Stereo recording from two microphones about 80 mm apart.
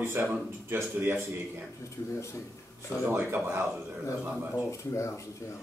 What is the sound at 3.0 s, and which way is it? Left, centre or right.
A man's voice, right.